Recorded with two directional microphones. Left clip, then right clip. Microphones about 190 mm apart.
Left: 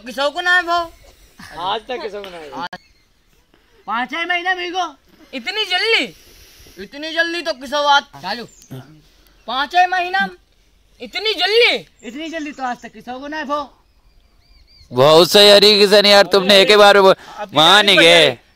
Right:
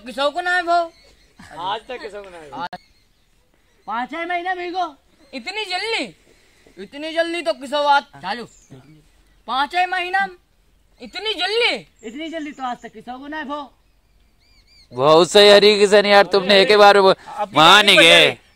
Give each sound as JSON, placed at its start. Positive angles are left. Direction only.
{"t": 0.0, "sound": "a man's voice", "side_deg": -15}
{"t": 1.6, "sound": "speech", "side_deg": 45}
{"t": 2.5, "sound": "a man's voice", "side_deg": -15}
{"t": 3.8, "sound": "speech", "side_deg": 25}
{"t": 5.2, "sound": "speech", "side_deg": 15}
{"t": 6.8, "sound": "a man's voice", "side_deg": -15}
{"t": 8.7, "sound": "speech", "side_deg": 25}
{"t": 9.5, "sound": "a man's voice", "side_deg": -15}
{"t": 11.0, "sound": "speech", "side_deg": 15}
{"t": 12.0, "sound": "speech", "side_deg": 25}
{"t": 14.9, "sound": "a man's voice", "side_deg": 25}